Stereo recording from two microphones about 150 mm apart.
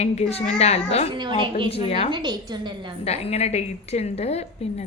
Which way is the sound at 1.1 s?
30° right (ahead or behind).